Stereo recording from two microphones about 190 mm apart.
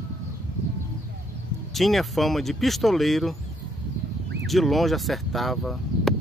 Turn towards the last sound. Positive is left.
turn(degrees=0)  # may be behind; listen again after turning